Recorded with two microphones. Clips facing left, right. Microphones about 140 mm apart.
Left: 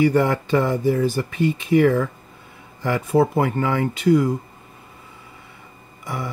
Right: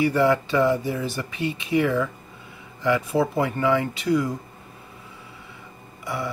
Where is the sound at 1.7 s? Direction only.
50° left (ahead or behind).